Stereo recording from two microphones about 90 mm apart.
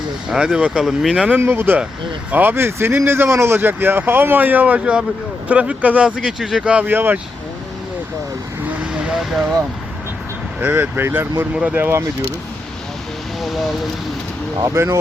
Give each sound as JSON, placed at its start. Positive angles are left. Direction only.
{"t": 0.3, "sound": "speech", "side_deg": -5}
{"t": 1.3, "sound": "speech", "side_deg": -25}
{"t": 8.8, "sound": "vehicle", "side_deg": -10}
{"t": 10.6, "sound": "speech", "side_deg": -25}
{"t": 13.4, "sound": "speech", "side_deg": 0}